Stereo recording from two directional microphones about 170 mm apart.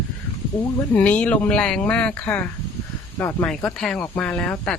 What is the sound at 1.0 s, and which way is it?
Speech, 10° left (ahead or behind).